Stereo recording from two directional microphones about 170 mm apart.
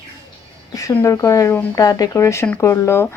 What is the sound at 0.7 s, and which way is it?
Speech, 20° left (ahead or behind).